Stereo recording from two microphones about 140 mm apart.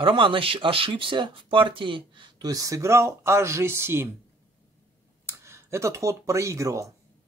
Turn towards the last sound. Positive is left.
turn(degrees=-20)  # may be behind; listen again after turning